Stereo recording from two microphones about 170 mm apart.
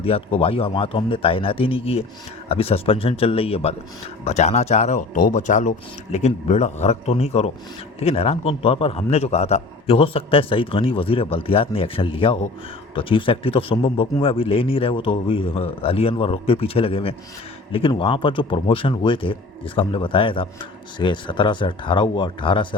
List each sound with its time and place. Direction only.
0.0 s a man's voice: 35° left (ahead or behind)